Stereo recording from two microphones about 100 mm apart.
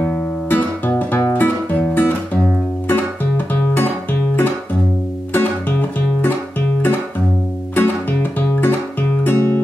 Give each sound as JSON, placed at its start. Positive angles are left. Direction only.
{"t": 0.0, "sound": "music", "side_deg": 15}
{"t": 2.9, "sound": "guitar", "side_deg": 20}
{"t": 5.3, "sound": "music", "side_deg": 20}
{"t": 7.7, "sound": "music", "side_deg": 20}